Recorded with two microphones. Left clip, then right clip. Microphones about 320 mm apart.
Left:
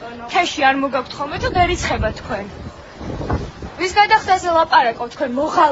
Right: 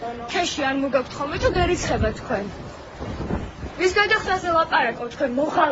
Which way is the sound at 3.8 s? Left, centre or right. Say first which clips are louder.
Left 5 dB; centre.